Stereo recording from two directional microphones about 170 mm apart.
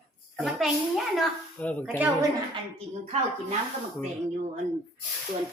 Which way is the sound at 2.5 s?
35° right (ahead or behind).